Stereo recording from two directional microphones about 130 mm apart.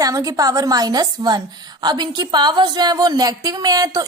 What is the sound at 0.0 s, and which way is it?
A woman's voice, 25° right (ahead or behind).